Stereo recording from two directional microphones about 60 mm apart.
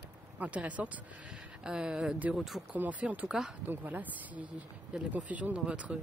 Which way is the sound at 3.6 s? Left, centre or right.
Right.